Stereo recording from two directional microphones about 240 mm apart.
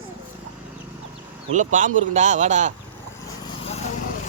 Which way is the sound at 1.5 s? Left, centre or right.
Right.